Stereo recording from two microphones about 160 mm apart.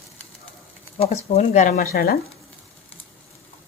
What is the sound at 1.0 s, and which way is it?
Speech, 45° left (ahead or behind).